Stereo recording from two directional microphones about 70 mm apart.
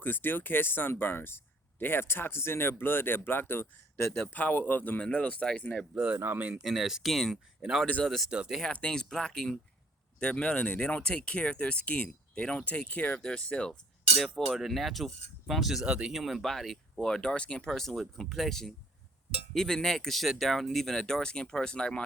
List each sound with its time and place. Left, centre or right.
0.0 s speech: left; by 5.6 s centre
5.9 s speech: right
6.5 s speech: centre
8.0 s speech: centre
8.6 s speech: centre
17.7 s speech: centre